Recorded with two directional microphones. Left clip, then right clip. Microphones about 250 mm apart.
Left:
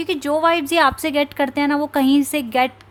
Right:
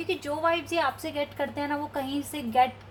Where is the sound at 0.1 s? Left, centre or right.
Left.